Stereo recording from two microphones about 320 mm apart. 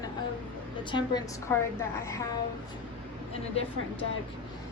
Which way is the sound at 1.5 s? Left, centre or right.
Centre.